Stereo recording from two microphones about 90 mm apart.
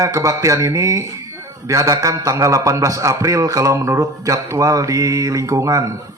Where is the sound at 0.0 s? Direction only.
40° right (ahead or behind).